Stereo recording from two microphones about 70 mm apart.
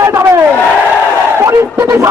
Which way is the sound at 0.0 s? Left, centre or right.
Right.